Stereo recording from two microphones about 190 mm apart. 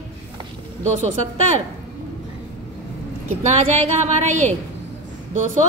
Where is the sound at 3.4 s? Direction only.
35° right (ahead or behind).